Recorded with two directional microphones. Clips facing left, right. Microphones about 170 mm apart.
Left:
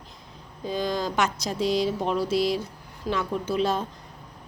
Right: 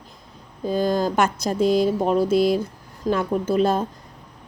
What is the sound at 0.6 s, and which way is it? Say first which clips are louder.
Speech: right 6 dB; 45° right (ahead or behind).